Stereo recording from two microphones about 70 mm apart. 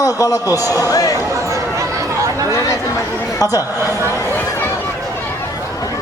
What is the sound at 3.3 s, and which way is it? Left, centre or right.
Speech, left.